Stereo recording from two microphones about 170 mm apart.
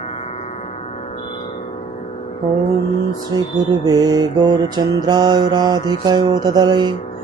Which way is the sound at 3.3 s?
25° right (ahead or behind).